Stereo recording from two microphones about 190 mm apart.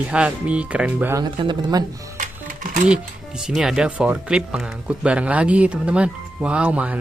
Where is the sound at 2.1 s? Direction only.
45° right (ahead or behind).